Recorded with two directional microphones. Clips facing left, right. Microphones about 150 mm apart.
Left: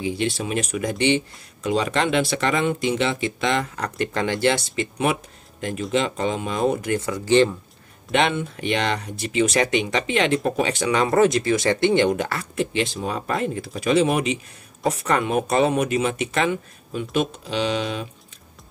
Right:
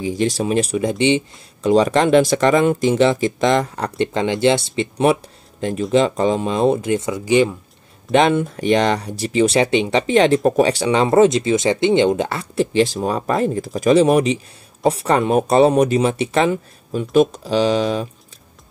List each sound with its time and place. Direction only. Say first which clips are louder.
0.0 s speech: right 5 dB; 40° right (ahead or behind); by 1.2 s 20° right (ahead or behind)
1.6 s speech: right 7 dB; 35° right (ahead or behind); by 7.5 s 10° right (ahead or behind)
8.1 s speech: right 6 dB; 40° right (ahead or behind)